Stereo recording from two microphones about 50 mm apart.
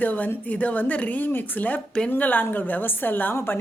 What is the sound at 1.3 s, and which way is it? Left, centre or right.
A woman's voice, left.